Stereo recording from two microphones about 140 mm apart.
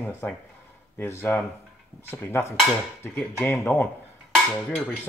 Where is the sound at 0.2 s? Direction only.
10° left (ahead or behind).